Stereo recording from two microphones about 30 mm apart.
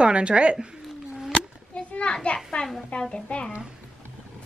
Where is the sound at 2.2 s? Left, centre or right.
Left.